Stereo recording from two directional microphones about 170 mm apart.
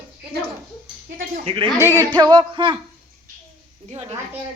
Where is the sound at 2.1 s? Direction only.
25° right (ahead or behind).